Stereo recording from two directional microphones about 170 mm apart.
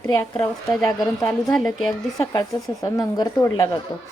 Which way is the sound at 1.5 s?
Centre (ahead or behind).